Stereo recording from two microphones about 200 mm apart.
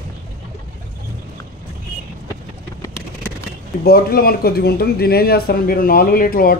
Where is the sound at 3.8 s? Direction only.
50° left (ahead or behind).